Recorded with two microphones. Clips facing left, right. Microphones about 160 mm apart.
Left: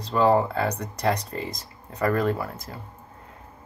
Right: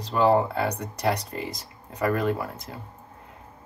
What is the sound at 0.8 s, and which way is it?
Speech, 15° right (ahead or behind).